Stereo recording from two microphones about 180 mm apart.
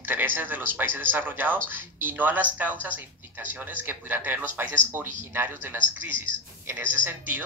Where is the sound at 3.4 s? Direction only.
10° right (ahead or behind).